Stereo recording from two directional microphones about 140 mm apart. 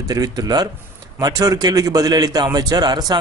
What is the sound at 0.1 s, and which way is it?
A man's voice, 25° right (ahead or behind).